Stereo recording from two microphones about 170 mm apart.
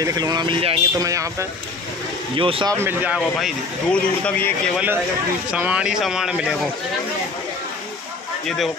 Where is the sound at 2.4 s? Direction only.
30° right (ahead or behind).